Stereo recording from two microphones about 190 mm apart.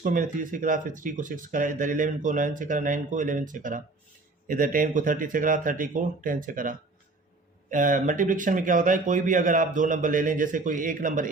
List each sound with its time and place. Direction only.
0.0 s speech: 45° right (ahead or behind)